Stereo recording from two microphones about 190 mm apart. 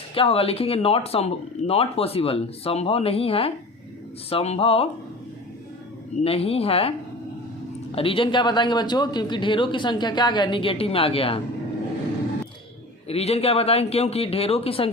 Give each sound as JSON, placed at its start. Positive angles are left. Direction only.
{"t": 0.1, "sound": "speech", "side_deg": 30}
{"t": 6.2, "sound": "speech", "side_deg": 30}
{"t": 7.9, "sound": "speech", "side_deg": 30}
{"t": 13.1, "sound": "speech", "side_deg": 35}